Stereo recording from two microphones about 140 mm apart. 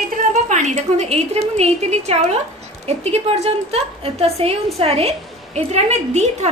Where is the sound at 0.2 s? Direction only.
60° right (ahead or behind).